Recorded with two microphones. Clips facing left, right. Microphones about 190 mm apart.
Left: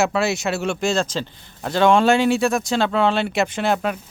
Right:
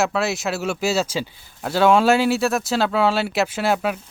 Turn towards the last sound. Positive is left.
turn(degrees=-5)  # may be behind; listen again after turning